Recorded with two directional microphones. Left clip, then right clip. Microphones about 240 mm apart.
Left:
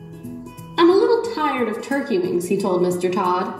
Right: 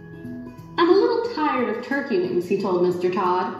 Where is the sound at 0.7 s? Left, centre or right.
Left.